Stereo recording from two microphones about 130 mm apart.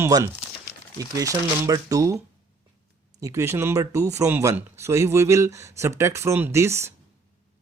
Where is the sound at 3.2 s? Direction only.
20° right (ahead or behind).